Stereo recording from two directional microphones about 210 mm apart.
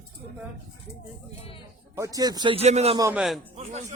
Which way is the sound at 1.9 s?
15° right (ahead or behind).